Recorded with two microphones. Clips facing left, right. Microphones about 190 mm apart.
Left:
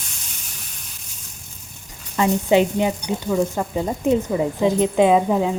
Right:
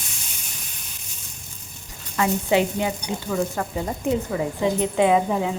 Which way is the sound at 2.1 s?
20° left (ahead or behind).